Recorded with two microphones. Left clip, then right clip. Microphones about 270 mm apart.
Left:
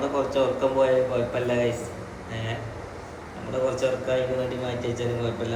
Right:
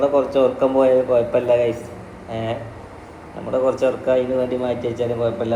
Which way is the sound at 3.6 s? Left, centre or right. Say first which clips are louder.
Right 6 dB; right.